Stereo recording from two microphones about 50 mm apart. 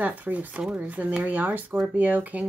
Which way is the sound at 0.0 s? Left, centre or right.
Right.